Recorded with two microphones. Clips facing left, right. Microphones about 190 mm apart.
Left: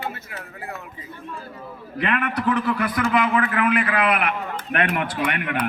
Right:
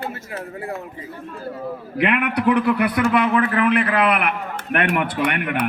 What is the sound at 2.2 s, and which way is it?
Speech, 65° right (ahead or behind).